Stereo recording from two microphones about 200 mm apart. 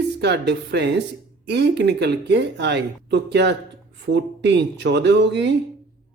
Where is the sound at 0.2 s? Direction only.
55° right (ahead or behind).